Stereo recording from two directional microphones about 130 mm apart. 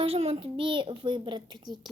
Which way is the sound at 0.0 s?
50° right (ahead or behind).